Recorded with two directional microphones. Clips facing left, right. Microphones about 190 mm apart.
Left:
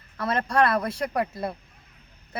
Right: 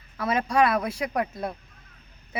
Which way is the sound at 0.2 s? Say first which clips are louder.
Even; 5° right (ahead or behind).